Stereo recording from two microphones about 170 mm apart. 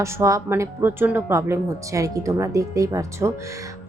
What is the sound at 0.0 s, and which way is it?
A woman's voice, 20° right (ahead or behind).